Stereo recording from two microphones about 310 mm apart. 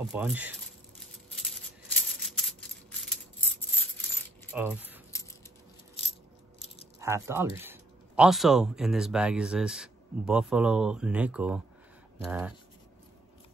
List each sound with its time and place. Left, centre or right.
0.1 s speech: centre
0.9 s a sound: centre
4.5 s keys jangling: centre
6.0 s coin: centre
7.0 s speech: centre